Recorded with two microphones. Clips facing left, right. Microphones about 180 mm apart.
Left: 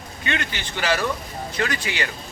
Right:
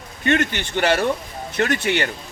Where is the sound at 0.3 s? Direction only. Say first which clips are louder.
Right 8 dB; 50° right (ahead or behind).